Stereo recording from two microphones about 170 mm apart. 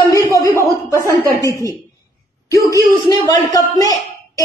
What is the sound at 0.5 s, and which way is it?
Speech, 20° right (ahead or behind).